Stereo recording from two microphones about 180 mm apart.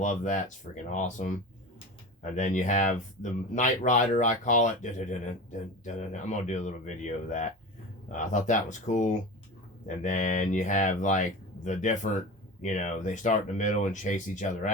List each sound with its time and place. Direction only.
0.0 s speech: 45° left (ahead or behind)